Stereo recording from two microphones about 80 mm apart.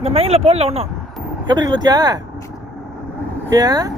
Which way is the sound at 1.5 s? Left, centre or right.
Right.